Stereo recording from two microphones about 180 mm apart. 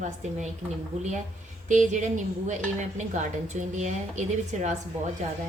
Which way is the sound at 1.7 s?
45° right (ahead or behind).